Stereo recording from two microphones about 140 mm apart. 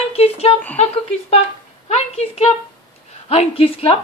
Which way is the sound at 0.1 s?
45° left (ahead or behind).